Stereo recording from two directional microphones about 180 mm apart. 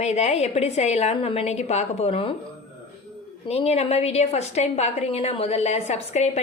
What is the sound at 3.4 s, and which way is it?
A woman's voice, 35° left (ahead or behind).